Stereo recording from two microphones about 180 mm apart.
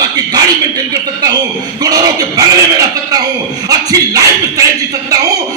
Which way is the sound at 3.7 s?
20° right (ahead or behind).